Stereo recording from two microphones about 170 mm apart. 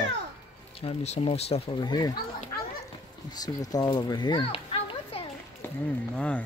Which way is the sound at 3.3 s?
20° left (ahead or behind).